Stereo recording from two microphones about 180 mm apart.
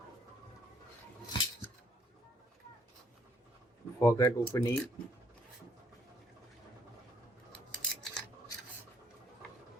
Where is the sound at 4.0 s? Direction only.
15° left (ahead or behind).